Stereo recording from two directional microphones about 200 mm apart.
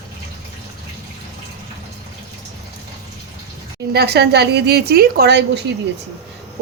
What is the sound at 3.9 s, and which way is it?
A woman's voice, 55° right (ahead or behind).